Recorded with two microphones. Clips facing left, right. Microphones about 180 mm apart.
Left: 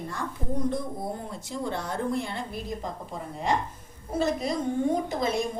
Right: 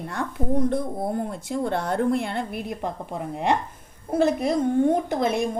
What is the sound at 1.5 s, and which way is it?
A woman's voice, 60° right (ahead or behind).